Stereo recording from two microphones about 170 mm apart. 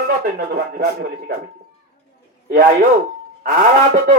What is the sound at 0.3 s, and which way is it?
Speech, 70° right (ahead or behind).